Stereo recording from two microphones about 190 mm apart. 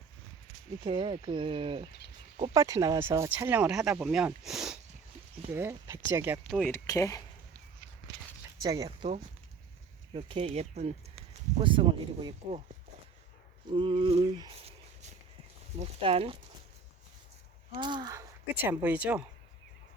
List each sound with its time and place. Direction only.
0.9 s speech: 25° right (ahead or behind); by 4.3 s 5° right (ahead or behind)
4.4 s a sound: centre (ahead or behind)
5.5 s speech: 15° right (ahead or behind)
6.5 s speech: 5° left (ahead or behind)
6.8 s speech: 15° left (ahead or behind)
8.6 s speech: 20° right (ahead or behind)
10.2 s speech: 30° right (ahead or behind)
13.7 s a sound: 25° right (ahead or behind)
15.8 s speech: 30° right (ahead or behind)
17.7 s speech: 25° right (ahead or behind); by 19.2 s 5° right (ahead or behind)